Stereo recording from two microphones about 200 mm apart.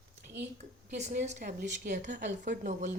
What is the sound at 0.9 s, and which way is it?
Speech, 35° right (ahead or behind).